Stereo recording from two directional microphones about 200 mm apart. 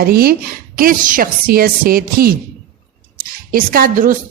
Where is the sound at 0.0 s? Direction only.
50° right (ahead or behind).